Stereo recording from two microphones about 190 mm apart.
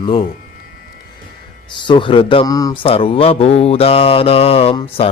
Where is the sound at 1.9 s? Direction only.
25° left (ahead or behind).